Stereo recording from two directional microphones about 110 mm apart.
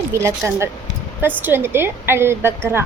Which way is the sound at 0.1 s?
25° right (ahead or behind).